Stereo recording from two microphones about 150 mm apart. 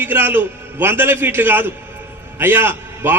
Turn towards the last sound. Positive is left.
turn(degrees=-15)  # may be behind; listen again after turning